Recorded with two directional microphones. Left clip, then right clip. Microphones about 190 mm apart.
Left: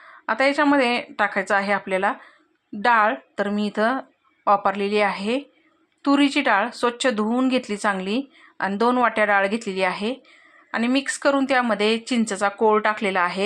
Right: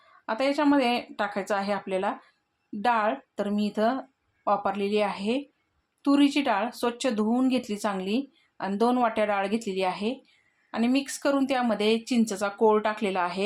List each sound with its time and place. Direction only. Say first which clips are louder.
0.3 s speech: left 6 dB; 15° left (ahead or behind)